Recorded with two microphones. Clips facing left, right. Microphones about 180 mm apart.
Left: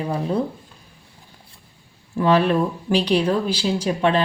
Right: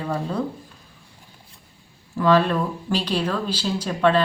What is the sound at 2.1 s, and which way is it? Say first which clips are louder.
Speech: left 1 dB; 15° left (ahead or behind).